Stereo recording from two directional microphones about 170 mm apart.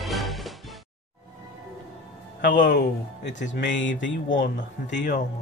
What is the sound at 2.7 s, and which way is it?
Mantra, 90° left.